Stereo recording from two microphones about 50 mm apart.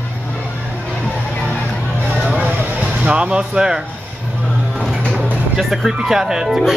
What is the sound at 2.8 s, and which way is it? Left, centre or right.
Speech, right.